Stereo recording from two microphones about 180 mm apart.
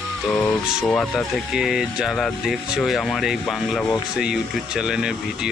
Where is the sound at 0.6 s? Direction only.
5° right (ahead or behind).